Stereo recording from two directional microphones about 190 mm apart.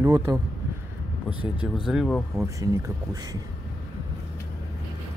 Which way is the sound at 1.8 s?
Centre (ahead or behind).